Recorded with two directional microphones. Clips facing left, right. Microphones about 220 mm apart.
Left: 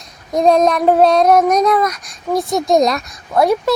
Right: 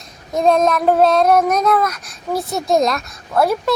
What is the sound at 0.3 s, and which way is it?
Speech, centre (ahead or behind).